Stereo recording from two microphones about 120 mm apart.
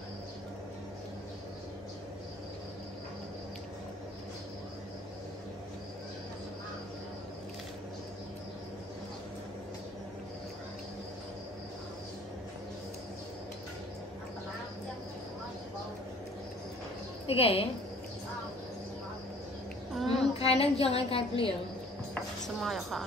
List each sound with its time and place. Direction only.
17.3 s a woman's voice: 55° left (ahead or behind)
19.9 s child singing: centre (ahead or behind)
20.3 s a woman's voice: 55° left (ahead or behind)
22.6 s a woman's voice: centre (ahead or behind)